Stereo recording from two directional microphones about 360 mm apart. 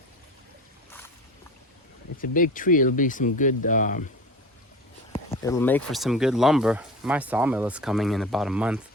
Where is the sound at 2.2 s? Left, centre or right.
Left.